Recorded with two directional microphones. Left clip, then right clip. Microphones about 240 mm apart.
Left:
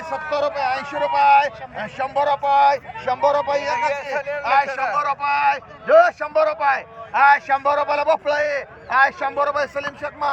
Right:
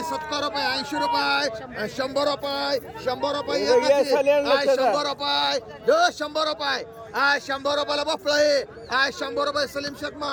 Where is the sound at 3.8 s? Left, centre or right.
Right.